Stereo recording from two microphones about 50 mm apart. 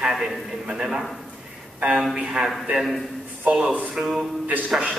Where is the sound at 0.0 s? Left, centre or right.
Centre.